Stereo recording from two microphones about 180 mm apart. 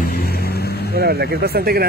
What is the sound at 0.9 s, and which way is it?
Speech, 60° right (ahead or behind).